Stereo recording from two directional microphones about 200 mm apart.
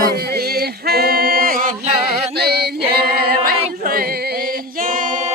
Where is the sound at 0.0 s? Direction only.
50° right (ahead or behind).